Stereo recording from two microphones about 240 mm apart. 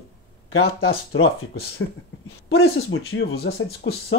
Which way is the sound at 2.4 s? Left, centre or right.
Left.